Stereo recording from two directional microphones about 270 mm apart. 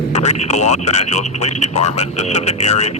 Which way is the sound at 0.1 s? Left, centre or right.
Left.